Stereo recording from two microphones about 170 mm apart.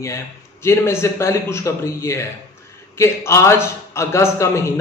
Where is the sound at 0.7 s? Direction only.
15° left (ahead or behind).